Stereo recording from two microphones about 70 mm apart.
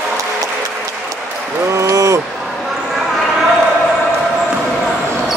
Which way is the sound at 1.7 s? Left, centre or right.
Right.